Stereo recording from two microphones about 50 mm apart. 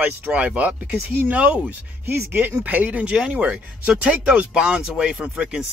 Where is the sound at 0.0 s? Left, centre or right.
Right.